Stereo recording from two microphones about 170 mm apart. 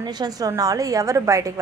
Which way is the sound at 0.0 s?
20° right (ahead or behind).